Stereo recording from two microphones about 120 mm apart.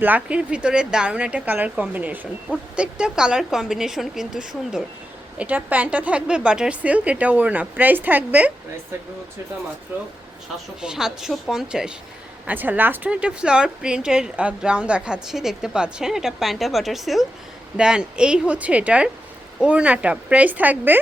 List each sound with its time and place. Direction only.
0.0 s a woman's voice: 10° right (ahead or behind)
9.9 s a woman's voice: 15° right (ahead or behind)
10.8 s a woman's voice: 5° right (ahead or behind)